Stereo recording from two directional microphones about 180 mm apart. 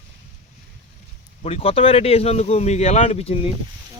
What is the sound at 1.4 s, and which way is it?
Speech, 35° left (ahead or behind).